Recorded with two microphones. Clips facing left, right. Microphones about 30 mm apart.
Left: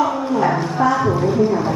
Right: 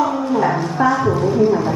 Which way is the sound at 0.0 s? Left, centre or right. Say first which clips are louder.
Even; centre.